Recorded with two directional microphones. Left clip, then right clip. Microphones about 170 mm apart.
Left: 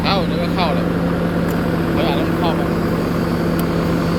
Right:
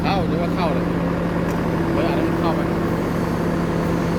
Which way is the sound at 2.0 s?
70° right (ahead or behind).